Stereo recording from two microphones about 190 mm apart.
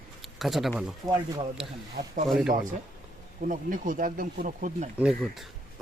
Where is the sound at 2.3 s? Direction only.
Centre (ahead or behind).